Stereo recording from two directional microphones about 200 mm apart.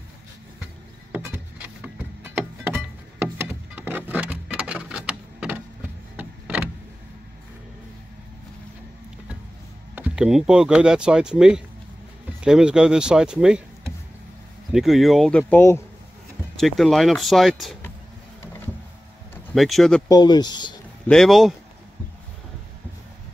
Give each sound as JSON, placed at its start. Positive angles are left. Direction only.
{"t": 1.1, "sound": "music", "side_deg": -10}
{"t": 6.1, "sound": "vehicle", "side_deg": -10}
{"t": 9.9, "sound": "speech", "side_deg": -5}
{"t": 19.3, "sound": "speech", "side_deg": 0}
{"t": 20.1, "sound": "speech", "side_deg": 20}
{"t": 21.1, "sound": "speech", "side_deg": 0}